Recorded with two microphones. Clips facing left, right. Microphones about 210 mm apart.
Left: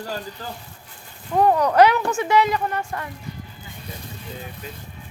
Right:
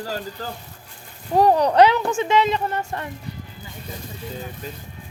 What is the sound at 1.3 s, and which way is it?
Speech, 35° right (ahead or behind).